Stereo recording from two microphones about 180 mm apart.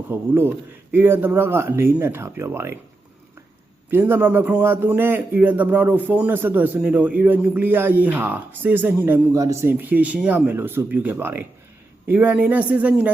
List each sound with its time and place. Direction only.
0.1 s a man's voice: 10° right (ahead or behind)
3.8 s a man's voice: 10° right (ahead or behind)